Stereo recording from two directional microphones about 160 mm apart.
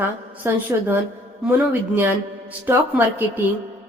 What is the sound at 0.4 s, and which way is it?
Speech, 15° right (ahead or behind).